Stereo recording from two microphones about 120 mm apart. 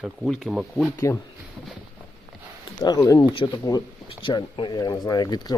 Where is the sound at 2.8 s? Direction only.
30° left (ahead or behind).